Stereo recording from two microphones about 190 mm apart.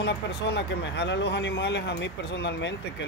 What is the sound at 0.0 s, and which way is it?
Speech, 60° left (ahead or behind).